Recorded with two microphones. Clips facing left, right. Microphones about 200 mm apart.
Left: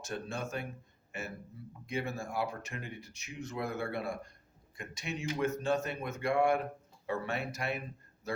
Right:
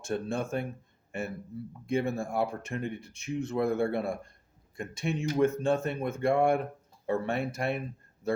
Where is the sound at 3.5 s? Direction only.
55° right (ahead or behind).